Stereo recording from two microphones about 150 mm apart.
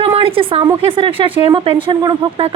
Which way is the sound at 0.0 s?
40° right (ahead or behind).